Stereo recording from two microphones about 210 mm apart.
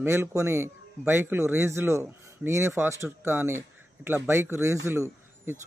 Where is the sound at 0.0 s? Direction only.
10° right (ahead or behind).